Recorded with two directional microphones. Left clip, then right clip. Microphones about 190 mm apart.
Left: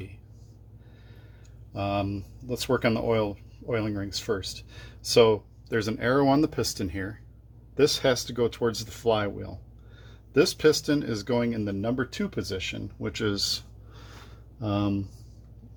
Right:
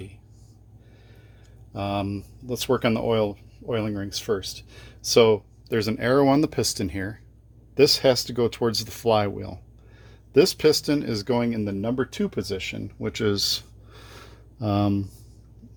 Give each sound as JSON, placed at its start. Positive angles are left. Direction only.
{"t": 1.7, "sound": "speech", "side_deg": -35}